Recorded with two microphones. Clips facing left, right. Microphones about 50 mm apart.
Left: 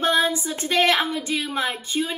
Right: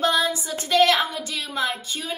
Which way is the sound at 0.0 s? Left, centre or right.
Left.